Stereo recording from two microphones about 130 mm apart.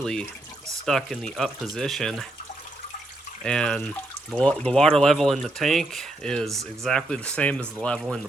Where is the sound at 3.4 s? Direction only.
5° left (ahead or behind).